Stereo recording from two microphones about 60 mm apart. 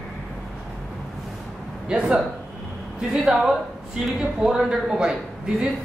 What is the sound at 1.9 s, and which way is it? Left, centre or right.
Speech, centre.